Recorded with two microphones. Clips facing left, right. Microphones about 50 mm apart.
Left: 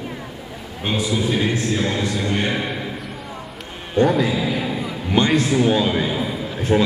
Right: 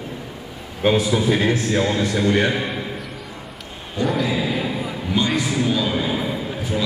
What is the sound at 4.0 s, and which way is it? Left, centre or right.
Speech, left.